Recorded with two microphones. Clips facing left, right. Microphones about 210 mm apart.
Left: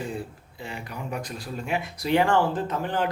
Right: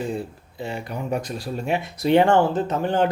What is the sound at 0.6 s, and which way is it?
Speech, 30° right (ahead or behind).